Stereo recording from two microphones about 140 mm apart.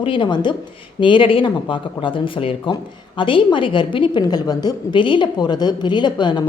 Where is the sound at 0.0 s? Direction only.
40° left (ahead or behind).